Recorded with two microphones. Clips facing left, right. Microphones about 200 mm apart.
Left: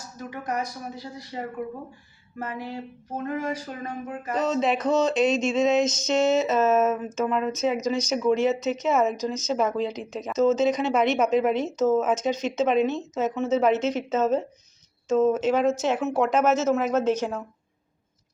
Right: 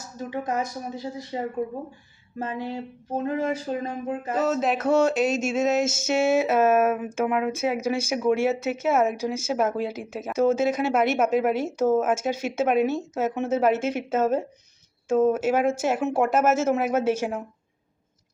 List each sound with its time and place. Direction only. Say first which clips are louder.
0.3 s speech: right 2 dB; 25° right (ahead or behind)
4.4 s speech: left 1 dB; 5° right (ahead or behind)